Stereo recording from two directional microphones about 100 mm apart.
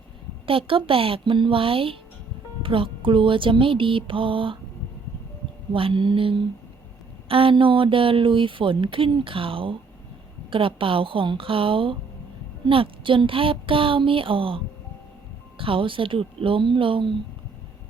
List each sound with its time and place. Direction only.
0.4 s speech: 60° right (ahead or behind)
5.7 s speech: 60° right (ahead or behind)